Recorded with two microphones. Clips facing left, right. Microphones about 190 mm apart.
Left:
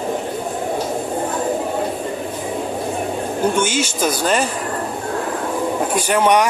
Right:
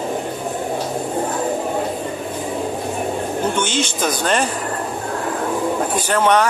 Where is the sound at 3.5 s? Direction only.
10° left (ahead or behind).